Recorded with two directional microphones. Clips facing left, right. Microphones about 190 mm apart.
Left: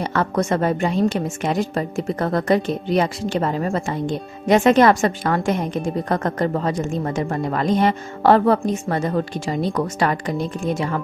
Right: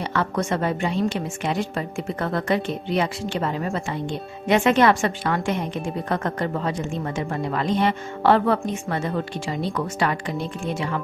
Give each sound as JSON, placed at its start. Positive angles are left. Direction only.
{"t": 0.0, "sound": "a woman's voice", "side_deg": 45}